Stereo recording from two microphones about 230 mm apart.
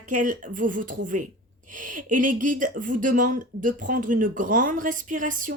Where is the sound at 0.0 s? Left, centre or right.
Right.